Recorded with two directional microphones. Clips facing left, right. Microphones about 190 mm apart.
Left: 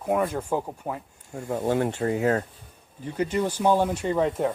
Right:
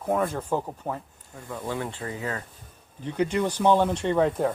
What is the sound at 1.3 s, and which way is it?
Speech, 45° left (ahead or behind).